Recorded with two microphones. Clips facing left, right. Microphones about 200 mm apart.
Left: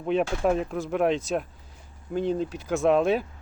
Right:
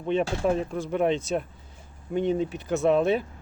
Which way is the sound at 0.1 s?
Centre (ahead or behind).